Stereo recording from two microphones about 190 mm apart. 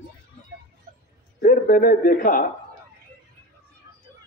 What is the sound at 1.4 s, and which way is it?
Speech, 50° left (ahead or behind).